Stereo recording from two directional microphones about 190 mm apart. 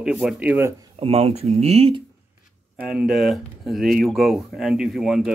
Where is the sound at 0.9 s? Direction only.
30° right (ahead or behind).